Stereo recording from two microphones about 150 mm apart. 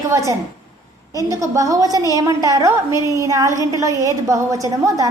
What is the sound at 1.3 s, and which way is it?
A woman's voice, 20° right (ahead or behind).